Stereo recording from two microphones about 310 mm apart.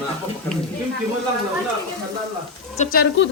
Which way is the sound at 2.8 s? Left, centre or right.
Left.